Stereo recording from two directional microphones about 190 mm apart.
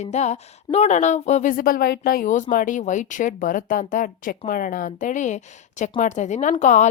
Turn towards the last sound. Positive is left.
turn(degrees=40)  # may be behind; listen again after turning